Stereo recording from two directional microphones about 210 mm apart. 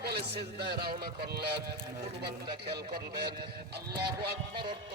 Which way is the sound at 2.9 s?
50° right (ahead or behind).